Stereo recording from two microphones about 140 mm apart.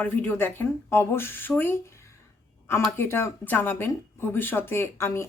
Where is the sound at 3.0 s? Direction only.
15° left (ahead or behind).